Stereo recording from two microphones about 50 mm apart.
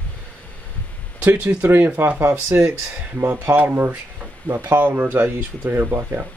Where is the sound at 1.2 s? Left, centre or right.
Right.